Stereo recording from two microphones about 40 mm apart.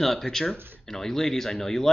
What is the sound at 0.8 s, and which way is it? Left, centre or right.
Speech, centre.